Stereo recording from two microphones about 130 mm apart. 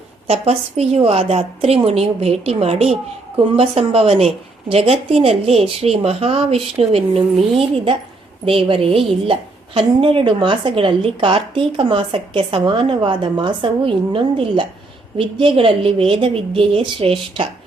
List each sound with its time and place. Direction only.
0.3 s a woman's voice: 55° right (ahead or behind)